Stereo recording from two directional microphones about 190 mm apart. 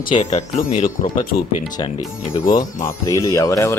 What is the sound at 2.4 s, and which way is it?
Speech, 45° left (ahead or behind).